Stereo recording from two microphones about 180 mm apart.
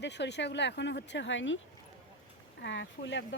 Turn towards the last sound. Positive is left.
turn(degrees=85)